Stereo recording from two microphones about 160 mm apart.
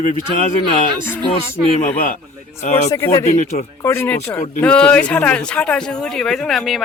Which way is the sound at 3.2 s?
45° left (ahead or behind).